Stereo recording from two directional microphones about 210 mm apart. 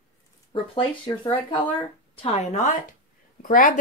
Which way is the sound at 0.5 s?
25° left (ahead or behind).